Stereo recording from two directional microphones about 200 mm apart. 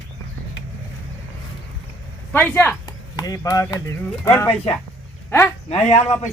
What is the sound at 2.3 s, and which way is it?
Speech, 10° left (ahead or behind).